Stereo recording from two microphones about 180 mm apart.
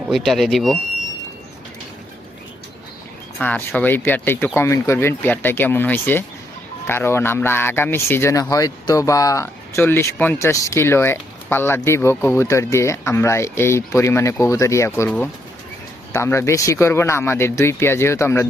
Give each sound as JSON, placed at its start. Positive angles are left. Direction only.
{"t": 0.1, "sound": "speech", "side_deg": 0}
{"t": 3.4, "sound": "speech", "side_deg": 10}